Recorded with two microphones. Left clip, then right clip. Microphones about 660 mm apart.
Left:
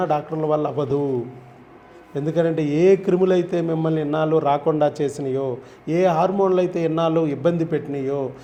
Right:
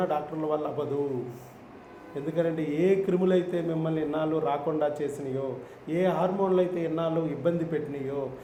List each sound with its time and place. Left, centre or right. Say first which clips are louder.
0.0 s a man's voice: left 7 dB; left
2.3 s a man's voice: left 7 dB; left